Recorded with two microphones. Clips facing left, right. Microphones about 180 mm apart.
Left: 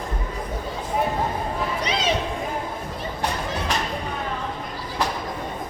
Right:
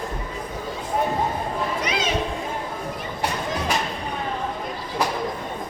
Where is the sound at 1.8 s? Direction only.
30° left (ahead or behind).